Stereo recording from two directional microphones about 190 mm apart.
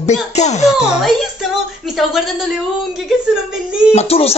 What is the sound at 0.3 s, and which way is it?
Speech, 35° left (ahead or behind).